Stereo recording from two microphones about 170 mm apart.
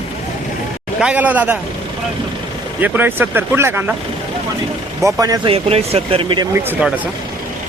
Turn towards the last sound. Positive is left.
turn(degrees=-10)  # may be behind; listen again after turning